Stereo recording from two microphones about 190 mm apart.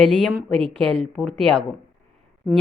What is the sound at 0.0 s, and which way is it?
Speech, 5° left (ahead or behind).